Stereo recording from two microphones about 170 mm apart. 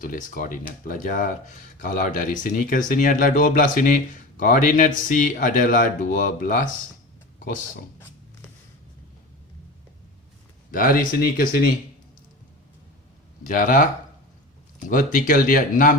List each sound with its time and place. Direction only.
0.0 s speech: 50° left (ahead or behind)
7.3 s a sound: 50° left (ahead or behind)
10.7 s speech: 55° left (ahead or behind)
13.4 s speech: 55° left (ahead or behind)